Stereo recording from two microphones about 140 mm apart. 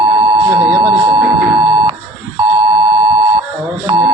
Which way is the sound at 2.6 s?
35° right (ahead or behind).